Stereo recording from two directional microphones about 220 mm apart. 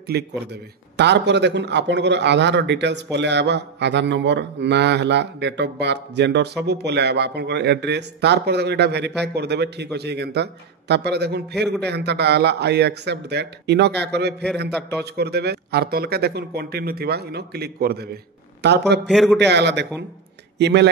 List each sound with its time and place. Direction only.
0.1 s a man's voice: 45° right (ahead or behind)
19.0 s a man's voice: centre (ahead or behind)
19.3 s a man's voice: 50° right (ahead or behind)